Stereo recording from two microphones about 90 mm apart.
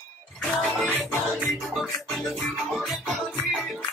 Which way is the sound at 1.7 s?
Centre (ahead or behind).